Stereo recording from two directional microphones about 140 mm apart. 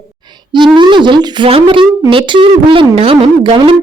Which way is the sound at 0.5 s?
35° right (ahead or behind).